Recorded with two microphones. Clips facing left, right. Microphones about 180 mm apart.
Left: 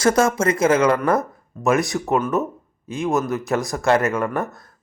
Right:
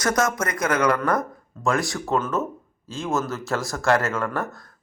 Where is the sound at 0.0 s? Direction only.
30° left (ahead or behind).